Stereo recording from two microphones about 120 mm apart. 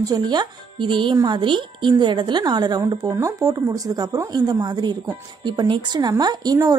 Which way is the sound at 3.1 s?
25° right (ahead or behind).